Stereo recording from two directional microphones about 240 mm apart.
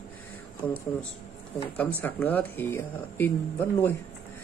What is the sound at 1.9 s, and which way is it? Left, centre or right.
Speech, centre.